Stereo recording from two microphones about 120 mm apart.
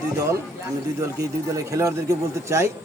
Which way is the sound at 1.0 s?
25° right (ahead or behind).